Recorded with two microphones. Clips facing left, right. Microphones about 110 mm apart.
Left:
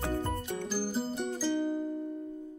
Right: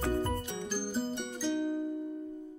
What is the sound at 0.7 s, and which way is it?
Music, 5° left (ahead or behind).